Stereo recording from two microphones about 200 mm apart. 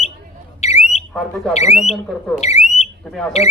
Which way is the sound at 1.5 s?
35° left (ahead or behind).